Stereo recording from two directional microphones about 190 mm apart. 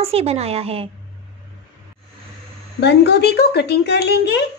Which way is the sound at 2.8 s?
65° left (ahead or behind).